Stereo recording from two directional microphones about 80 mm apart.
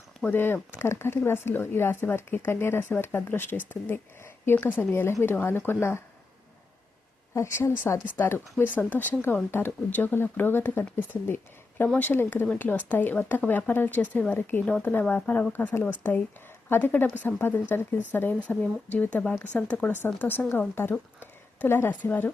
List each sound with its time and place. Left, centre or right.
0.3 s speech: left
7.3 s a woman's voice: left